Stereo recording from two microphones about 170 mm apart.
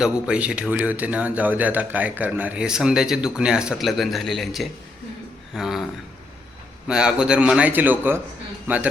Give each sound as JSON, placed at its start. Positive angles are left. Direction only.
{"t": 0.0, "sound": "speech", "side_deg": -5}
{"t": 6.8, "sound": "a man's voice", "side_deg": -5}